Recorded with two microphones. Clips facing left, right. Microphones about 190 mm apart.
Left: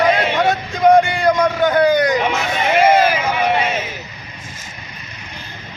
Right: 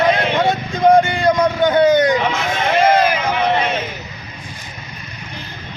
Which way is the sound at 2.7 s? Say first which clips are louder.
Left 1 dB; 5° left (ahead or behind).